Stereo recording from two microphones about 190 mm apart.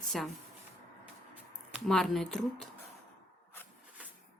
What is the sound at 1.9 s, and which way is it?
Speech, centre (ahead or behind).